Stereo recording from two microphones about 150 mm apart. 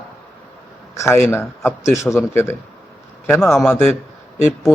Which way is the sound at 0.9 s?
15° left (ahead or behind).